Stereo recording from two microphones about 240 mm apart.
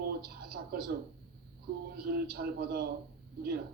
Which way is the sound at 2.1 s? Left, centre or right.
Right.